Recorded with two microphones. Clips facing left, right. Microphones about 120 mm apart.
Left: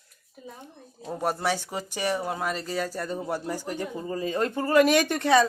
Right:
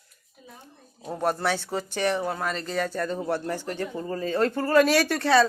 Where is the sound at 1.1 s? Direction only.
10° left (ahead or behind).